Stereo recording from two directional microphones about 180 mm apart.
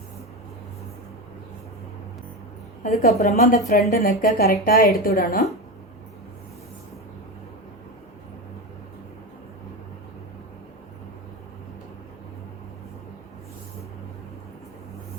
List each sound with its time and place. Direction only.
2.9 s a woman's voice: 60° left (ahead or behind)